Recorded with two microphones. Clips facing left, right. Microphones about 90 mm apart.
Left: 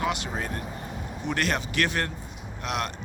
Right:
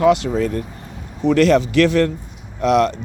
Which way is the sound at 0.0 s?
90° right.